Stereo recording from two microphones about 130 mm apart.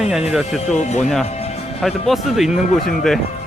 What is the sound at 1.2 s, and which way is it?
Music, 55° left (ahead or behind).